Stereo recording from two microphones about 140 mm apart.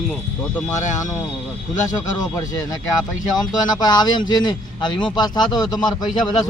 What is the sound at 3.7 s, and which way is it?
Speech, 30° left (ahead or behind).